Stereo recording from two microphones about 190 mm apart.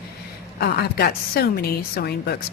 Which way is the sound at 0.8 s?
55° left (ahead or behind).